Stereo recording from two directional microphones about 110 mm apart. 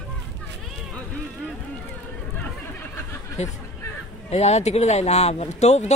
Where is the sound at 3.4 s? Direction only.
90° left.